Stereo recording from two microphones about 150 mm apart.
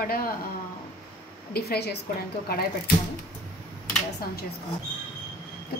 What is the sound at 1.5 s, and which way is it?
Speech, 90° left.